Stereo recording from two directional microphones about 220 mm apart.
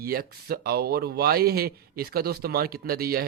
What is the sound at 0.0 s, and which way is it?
A man's voice, 45° right (ahead or behind).